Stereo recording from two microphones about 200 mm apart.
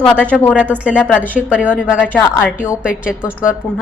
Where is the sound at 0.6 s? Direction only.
5° right (ahead or behind).